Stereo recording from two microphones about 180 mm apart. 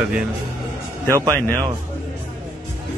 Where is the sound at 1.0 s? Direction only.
15° right (ahead or behind).